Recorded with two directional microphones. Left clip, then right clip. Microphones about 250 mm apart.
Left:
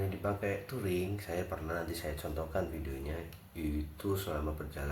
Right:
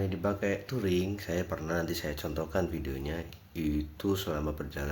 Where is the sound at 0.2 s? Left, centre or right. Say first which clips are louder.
Right 4 dB; right.